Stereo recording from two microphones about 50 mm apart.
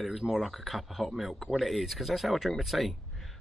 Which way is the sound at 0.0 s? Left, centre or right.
Centre.